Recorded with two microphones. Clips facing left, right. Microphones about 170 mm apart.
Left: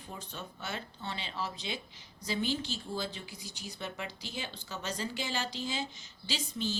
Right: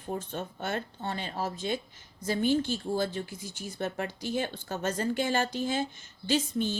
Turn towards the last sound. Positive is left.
turn(degrees=-50)  # may be behind; listen again after turning